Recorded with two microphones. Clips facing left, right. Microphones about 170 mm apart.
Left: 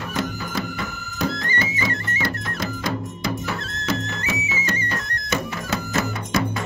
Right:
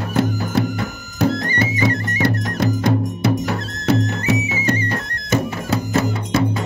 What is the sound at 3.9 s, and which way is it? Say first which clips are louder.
Music: right 8 dB; 40° right (ahead or behind).